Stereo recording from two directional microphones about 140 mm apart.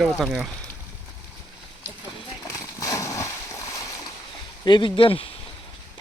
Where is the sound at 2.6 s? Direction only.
25° left (ahead or behind).